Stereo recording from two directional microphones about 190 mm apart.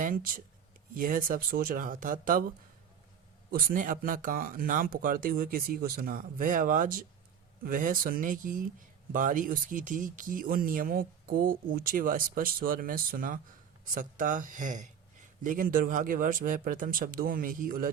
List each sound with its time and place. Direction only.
0.0 s speech: 50° right (ahead or behind)
3.5 s speech: 50° right (ahead or behind)